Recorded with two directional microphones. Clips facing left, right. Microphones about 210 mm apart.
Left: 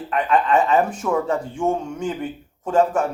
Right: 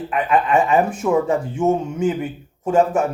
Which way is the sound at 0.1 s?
5° right (ahead or behind).